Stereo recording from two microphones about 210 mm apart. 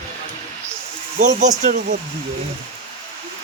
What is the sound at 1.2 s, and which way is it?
Speech, 35° right (ahead or behind).